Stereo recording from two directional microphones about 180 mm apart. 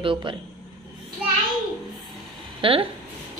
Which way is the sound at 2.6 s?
30° right (ahead or behind).